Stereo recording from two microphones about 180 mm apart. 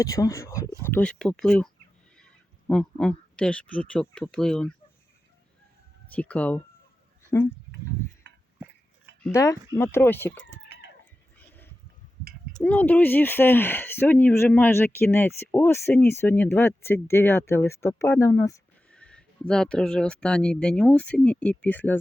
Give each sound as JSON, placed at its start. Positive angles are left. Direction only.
{"t": 0.0, "sound": "speech", "side_deg": 20}
{"t": 6.1, "sound": "speech", "side_deg": 10}
{"t": 8.2, "sound": "a sound", "side_deg": -75}
{"t": 9.3, "sound": "speech", "side_deg": 20}
{"t": 11.3, "sound": "a sound", "side_deg": 10}
{"t": 12.5, "sound": "speech", "side_deg": 10}
{"t": 18.9, "sound": "speech", "side_deg": 5}